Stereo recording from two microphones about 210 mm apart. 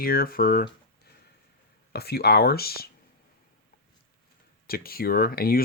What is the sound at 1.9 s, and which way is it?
Speech, 50° left (ahead or behind).